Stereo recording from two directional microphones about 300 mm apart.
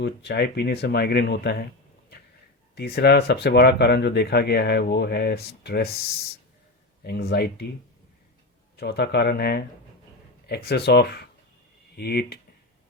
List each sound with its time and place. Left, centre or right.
0.0 s speech: left
8.7 s speech: left